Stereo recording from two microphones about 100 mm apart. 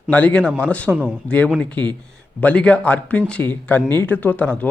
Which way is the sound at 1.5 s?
15° left (ahead or behind).